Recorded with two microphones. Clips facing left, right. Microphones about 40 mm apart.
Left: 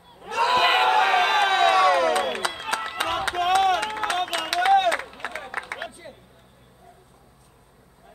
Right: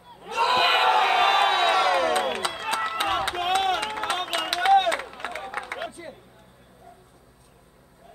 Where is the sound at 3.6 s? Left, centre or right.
Centre.